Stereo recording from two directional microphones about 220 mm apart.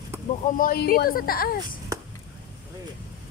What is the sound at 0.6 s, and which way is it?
Speech, 40° left (ahead or behind).